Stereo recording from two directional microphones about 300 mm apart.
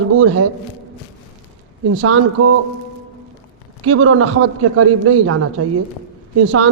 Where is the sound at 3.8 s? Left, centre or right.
Right.